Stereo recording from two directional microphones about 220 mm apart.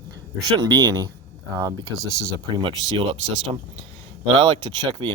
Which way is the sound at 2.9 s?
20° right (ahead or behind).